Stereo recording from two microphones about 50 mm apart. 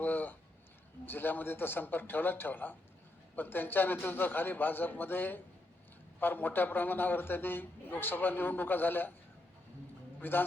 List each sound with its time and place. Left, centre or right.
0.0 s a sound: left
1.0 s a man's voice: left
10.2 s a man's voice: left